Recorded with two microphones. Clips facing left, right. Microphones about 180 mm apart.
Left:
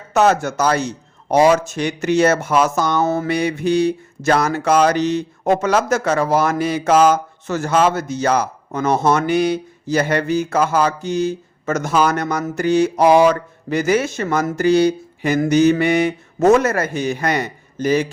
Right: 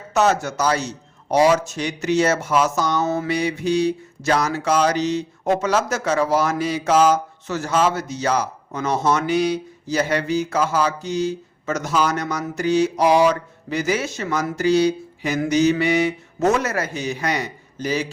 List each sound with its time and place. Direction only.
0.1 s a man's voice: 55° left (ahead or behind)